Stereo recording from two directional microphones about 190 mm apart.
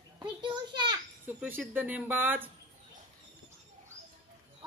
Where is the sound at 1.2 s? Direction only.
10° right (ahead or behind).